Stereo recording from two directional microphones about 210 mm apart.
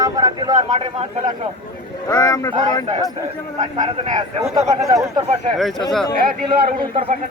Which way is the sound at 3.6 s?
30° right (ahead or behind).